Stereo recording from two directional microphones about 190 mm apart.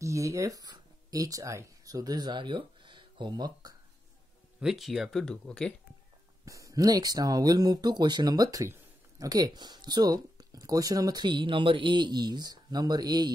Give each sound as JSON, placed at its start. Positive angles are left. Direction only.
{"t": 0.0, "sound": "speech", "side_deg": -15}
{"t": 4.6, "sound": "speech", "side_deg": 0}
{"t": 6.4, "sound": "speech", "side_deg": -15}